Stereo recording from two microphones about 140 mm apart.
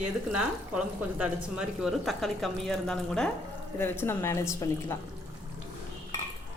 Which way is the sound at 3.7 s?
15° left (ahead or behind).